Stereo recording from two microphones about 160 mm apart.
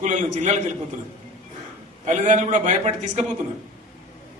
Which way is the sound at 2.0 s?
50° right (ahead or behind).